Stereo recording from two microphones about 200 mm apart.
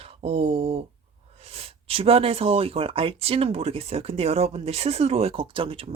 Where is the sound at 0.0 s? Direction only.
30° right (ahead or behind).